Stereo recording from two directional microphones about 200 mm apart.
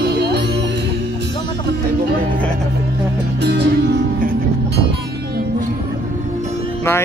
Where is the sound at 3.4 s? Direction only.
55° right (ahead or behind).